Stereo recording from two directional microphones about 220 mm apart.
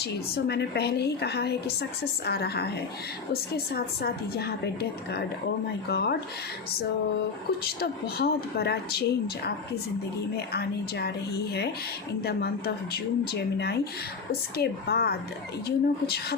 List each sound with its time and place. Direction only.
0.0 s speech: 50° left (ahead or behind)
7.6 s speech: 45° left (ahead or behind)
12.2 s speech: 45° left (ahead or behind)